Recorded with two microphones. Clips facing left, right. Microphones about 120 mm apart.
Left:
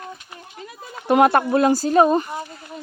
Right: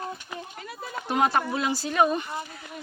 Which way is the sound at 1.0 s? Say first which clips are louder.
Left 9 dB; 60° left (ahead or behind).